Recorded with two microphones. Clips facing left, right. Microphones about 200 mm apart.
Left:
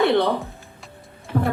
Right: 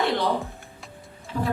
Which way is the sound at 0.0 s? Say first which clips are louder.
Left 7 dB; 60° left (ahead or behind).